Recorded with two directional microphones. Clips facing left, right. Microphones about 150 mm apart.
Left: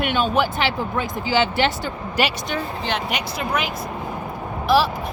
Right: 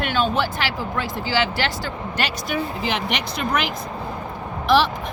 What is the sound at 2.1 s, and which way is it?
Speech, 5° left (ahead or behind).